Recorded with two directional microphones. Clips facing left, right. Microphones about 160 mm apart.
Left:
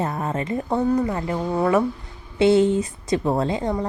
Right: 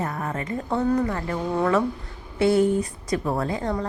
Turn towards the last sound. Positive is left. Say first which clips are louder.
# left 3 dB
turn(degrees=20)  # may be behind; listen again after turning